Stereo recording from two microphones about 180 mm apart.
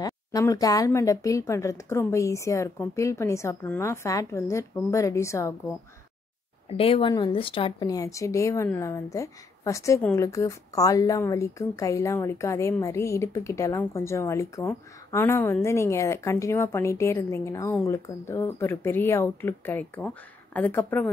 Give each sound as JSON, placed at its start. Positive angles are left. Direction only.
{"t": 0.0, "sound": "a woman's voice", "side_deg": 20}
{"t": 6.8, "sound": "a woman's voice", "side_deg": 30}